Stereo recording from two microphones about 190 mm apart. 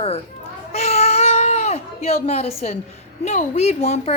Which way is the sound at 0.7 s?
35° left (ahead or behind).